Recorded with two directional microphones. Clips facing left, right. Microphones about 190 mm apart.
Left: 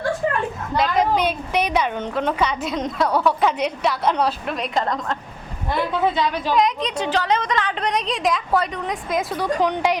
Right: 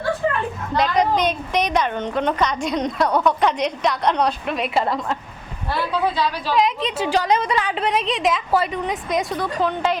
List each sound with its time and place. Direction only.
0.8 s a woman's voice: 5° left (ahead or behind)
5.7 s a woman's voice: 20° left (ahead or behind)
6.5 s a woman's voice: centre (ahead or behind); by 10.0 s 15° left (ahead or behind)